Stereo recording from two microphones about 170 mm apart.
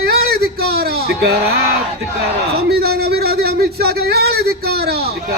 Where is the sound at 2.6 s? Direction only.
65° right (ahead or behind).